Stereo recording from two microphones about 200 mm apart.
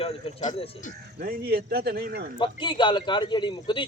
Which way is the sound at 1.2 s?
50° right (ahead or behind).